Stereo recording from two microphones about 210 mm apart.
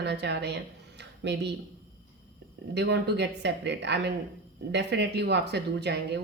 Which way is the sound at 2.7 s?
55° right (ahead or behind).